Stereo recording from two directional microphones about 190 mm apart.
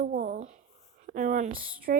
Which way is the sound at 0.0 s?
45° right (ahead or behind).